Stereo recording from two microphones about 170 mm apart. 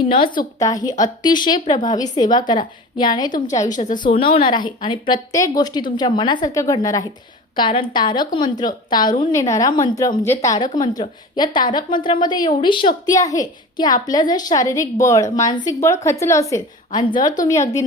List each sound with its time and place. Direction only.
0.6 s a woman's voice: 20° left (ahead or behind)
3.2 s a woman's voice: 50° left (ahead or behind)
4.0 s a woman's voice: 30° left (ahead or behind)